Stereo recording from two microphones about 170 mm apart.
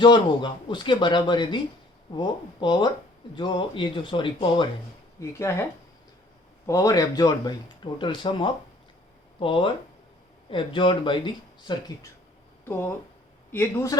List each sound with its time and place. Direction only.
0.0 s a man's voice: 25° left (ahead or behind)
5.4 s speech: 15° left (ahead or behind)
6.7 s a man's voice: 20° left (ahead or behind)
13.5 s speech: 15° left (ahead or behind)